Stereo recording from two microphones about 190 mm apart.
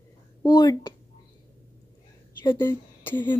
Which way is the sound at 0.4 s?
20° left (ahead or behind).